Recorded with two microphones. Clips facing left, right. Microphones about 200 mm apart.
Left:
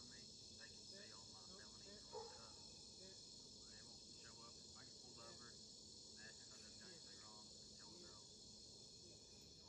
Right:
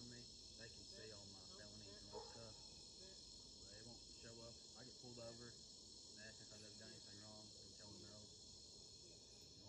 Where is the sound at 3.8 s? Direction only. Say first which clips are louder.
Right 4 dB; 25° right (ahead or behind).